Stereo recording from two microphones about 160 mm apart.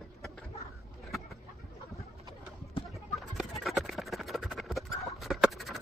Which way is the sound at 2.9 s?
Centre (ahead or behind).